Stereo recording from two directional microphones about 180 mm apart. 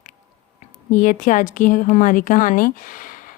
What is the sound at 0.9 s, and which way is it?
Speech, 45° left (ahead or behind).